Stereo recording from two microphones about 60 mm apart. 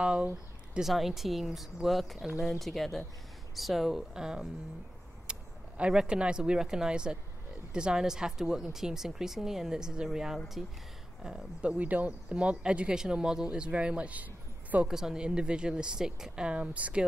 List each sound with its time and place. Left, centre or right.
0.0 s speech: centre
0.7 s speech: centre
11.7 s speech: right
14.9 s speech: centre